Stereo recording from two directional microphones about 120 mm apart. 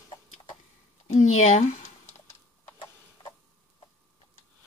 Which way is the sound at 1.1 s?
70° left (ahead or behind).